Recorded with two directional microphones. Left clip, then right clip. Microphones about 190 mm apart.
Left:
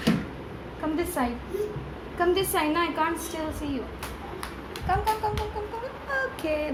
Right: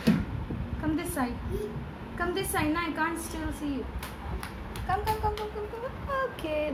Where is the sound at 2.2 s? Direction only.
30° left (ahead or behind).